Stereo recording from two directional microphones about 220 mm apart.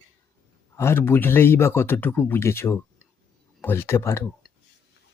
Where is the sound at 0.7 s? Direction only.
10° left (ahead or behind).